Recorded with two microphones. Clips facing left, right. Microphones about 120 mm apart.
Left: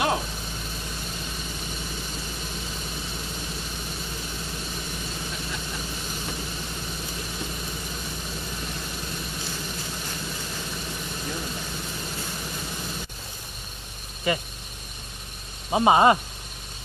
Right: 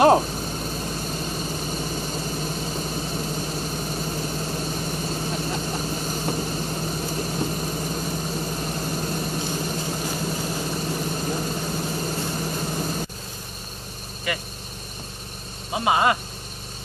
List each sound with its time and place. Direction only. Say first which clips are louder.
0.0 s vehicle: right 10 dB; 40° right (ahead or behind)
14.3 s speech: left 3 dB; 30° left (ahead or behind)
15.7 s speech: left 3 dB; 25° left (ahead or behind)